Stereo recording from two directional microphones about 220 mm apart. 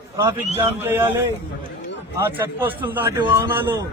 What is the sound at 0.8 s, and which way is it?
Speech, 10° right (ahead or behind).